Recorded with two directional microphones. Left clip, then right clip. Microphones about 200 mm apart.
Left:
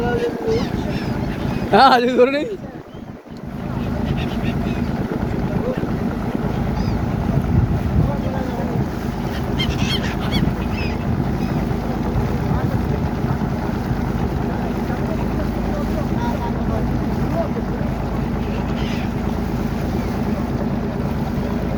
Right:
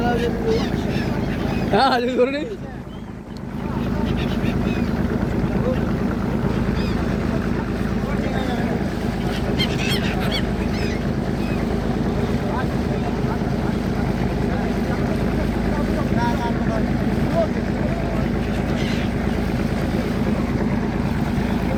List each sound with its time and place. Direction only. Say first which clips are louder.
1.7 s speech: left 6 dB; 60° left (ahead or behind)